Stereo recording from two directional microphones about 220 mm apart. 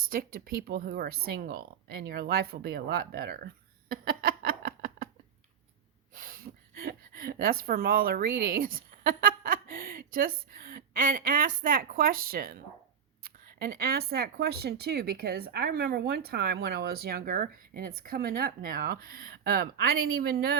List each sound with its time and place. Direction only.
0.0 s speech: 40° right (ahead or behind)
3.9 s a sound: 40° right (ahead or behind)
6.1 s speech: 40° right (ahead or behind)